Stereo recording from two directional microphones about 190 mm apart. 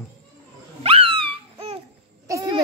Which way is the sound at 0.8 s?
30° right (ahead or behind).